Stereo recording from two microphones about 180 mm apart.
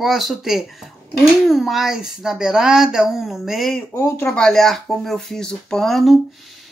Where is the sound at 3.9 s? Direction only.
15° left (ahead or behind).